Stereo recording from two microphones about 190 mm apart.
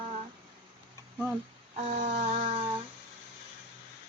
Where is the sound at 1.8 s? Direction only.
40° right (ahead or behind).